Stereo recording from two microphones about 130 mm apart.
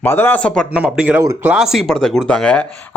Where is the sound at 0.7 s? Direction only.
10° right (ahead or behind); by 2.7 s 10° left (ahead or behind).